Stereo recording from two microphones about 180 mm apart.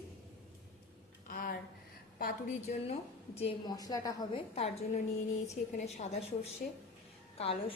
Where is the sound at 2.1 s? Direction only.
50° left (ahead or behind).